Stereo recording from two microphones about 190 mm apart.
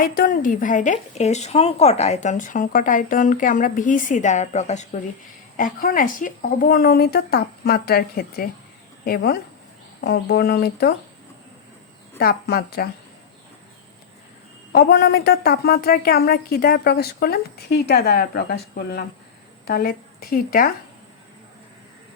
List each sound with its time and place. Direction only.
0.0 s a woman's voice: 50° left (ahead or behind)
12.2 s a woman's voice: 55° left (ahead or behind)
14.7 s a woman's voice: 55° left (ahead or behind)